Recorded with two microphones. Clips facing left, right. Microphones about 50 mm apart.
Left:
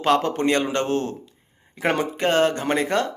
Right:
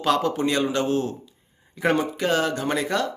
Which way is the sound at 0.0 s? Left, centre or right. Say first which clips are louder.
Left 2 dB; left.